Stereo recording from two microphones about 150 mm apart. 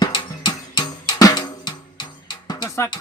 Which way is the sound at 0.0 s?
30° left (ahead or behind).